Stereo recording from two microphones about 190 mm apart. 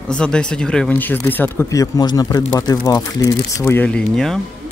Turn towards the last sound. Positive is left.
turn(degrees=0)  # may be behind; listen again after turning